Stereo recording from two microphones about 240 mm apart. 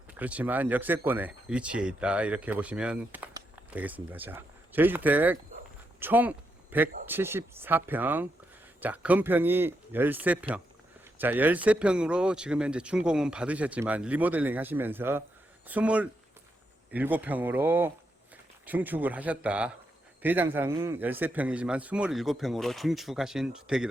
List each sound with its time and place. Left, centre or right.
0.1 s speech: centre